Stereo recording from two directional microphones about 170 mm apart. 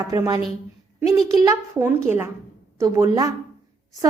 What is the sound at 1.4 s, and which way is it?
A woman's voice, 15° right (ahead or behind).